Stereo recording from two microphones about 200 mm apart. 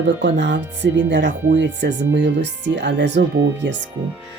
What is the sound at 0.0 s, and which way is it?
Speech, 65° right (ahead or behind).